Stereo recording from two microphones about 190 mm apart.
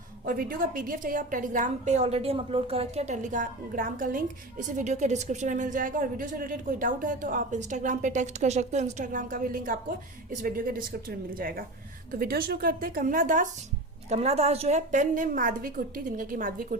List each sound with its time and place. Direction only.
0.3 s a woman's voice: 50° right (ahead or behind)